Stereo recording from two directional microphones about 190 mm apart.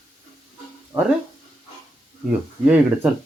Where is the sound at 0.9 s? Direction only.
20° right (ahead or behind).